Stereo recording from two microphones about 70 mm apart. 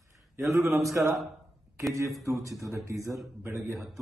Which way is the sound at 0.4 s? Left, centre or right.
Right.